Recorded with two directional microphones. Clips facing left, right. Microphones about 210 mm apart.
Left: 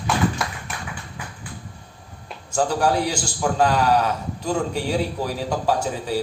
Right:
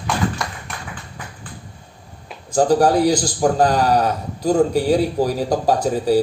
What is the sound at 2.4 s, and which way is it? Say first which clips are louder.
Speech: right 6 dB; 35° right (ahead or behind).